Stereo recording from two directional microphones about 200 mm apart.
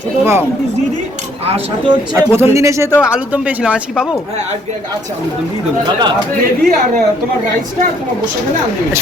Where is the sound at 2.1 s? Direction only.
10° right (ahead or behind).